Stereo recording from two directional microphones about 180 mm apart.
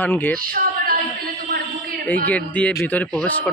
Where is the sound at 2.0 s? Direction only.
10° left (ahead or behind).